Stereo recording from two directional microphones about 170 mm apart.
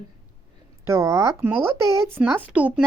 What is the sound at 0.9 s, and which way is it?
Speech, 20° right (ahead or behind).